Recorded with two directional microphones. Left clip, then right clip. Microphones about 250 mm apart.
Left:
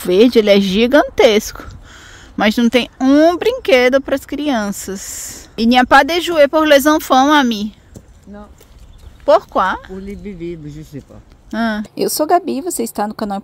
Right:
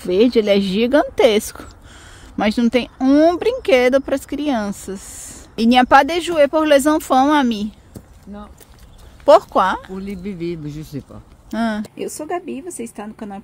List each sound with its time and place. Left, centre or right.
0.0 s speech: centre
9.2 s speech: centre
9.9 s speech: right
11.5 s speech: centre
11.9 s a woman's voice: left